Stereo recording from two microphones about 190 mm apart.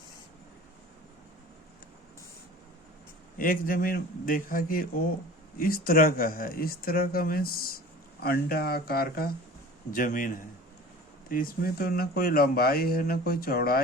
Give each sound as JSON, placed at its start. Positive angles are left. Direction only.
{"t": 3.3, "sound": "speech", "side_deg": 45}